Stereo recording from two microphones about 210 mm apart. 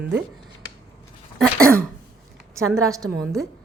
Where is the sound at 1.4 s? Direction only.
5° left (ahead or behind).